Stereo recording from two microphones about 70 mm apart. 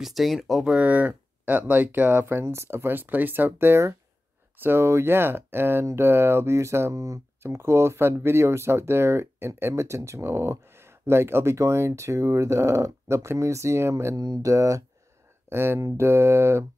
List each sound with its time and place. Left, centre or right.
0.0 s speech: centre
0.7 s speech: centre; by 14.1 s right
14.1 s speech: right
15.5 s speech: right